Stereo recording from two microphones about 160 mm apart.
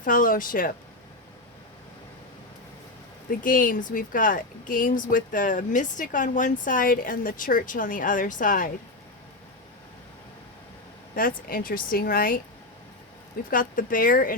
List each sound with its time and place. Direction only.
0.0 s speech: 60° left (ahead or behind)
3.2 s speech: 60° left (ahead or behind)
11.1 s speech: 65° left (ahead or behind)
13.5 s speech: 60° left (ahead or behind)